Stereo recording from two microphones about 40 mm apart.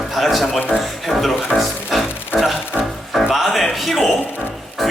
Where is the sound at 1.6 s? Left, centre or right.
Centre.